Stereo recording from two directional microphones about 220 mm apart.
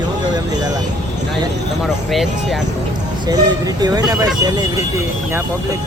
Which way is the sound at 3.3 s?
15° right (ahead or behind).